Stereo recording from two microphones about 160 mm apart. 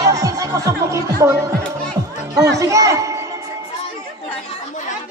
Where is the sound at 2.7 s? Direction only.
20° right (ahead or behind).